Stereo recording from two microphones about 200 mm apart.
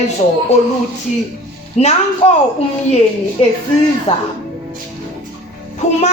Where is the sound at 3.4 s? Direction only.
30° left (ahead or behind).